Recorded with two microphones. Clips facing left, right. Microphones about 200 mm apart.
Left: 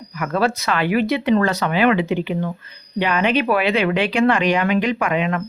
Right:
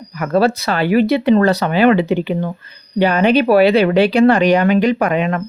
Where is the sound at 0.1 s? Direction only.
35° right (ahead or behind).